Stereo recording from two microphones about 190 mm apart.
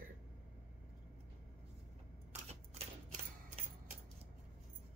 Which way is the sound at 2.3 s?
35° right (ahead or behind).